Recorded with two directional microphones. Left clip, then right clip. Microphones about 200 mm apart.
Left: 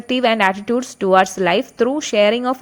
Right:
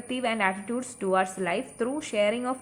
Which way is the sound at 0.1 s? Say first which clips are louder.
Left 11 dB; 40° left (ahead or behind).